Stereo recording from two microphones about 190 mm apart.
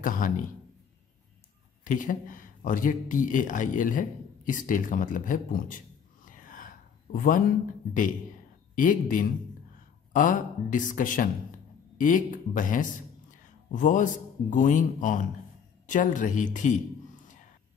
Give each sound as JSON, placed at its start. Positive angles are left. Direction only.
{"t": 0.0, "sound": "speech", "side_deg": 45}
{"t": 1.9, "sound": "speech", "side_deg": 45}
{"t": 6.3, "sound": "a sound", "side_deg": 45}
{"t": 8.7, "sound": "speech", "side_deg": 45}